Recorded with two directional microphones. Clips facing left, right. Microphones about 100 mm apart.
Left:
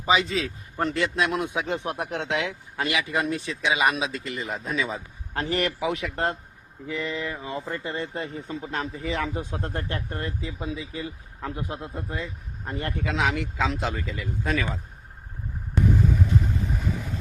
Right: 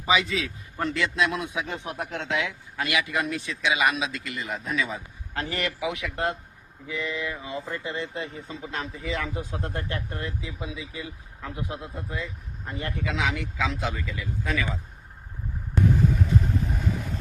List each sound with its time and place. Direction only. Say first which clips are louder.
0.0 s speech: left 1 dB; 40° left (ahead or behind)
2.0 s speech: right 2 dB; 20° left (ahead or behind); by 6.3 s 35° left (ahead or behind)
6.8 s a sound: left 1 dB; 45° left (ahead or behind)
7.9 s speech: left 1 dB; 45° left (ahead or behind)
15.7 s vehicle: even; centre (ahead or behind)